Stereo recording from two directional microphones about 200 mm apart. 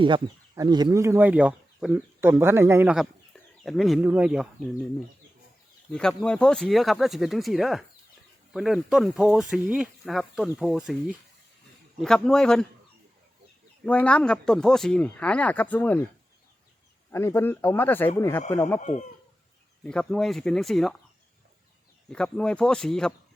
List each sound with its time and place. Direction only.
0.0 s speech: 20° right (ahead or behind); by 4.4 s 5° right (ahead or behind)
5.9 s speech: 5° left (ahead or behind)
11.9 s speech: centre (ahead or behind)
13.8 s speech: 5° left (ahead or behind)
17.1 s speech: 10° left (ahead or behind)
18.8 s speech: 40° left (ahead or behind)
19.8 s speech: 5° left (ahead or behind)
22.1 s speech: 5° left (ahead or behind)